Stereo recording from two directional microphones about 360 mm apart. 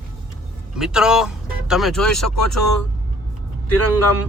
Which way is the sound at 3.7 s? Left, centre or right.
Left.